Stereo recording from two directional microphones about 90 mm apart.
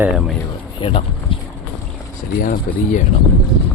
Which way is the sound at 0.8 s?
80° left.